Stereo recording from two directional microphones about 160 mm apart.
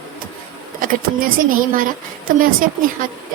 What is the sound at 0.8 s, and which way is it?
Speech, 60° right (ahead or behind).